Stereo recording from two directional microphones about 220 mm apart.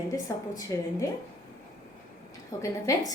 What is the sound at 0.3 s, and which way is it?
Speech, 15° left (ahead or behind).